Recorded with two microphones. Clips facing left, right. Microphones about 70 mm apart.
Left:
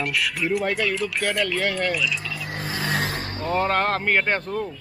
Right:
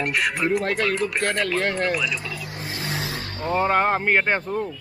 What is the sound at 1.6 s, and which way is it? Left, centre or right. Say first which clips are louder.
Speech: right 1 dB; centre.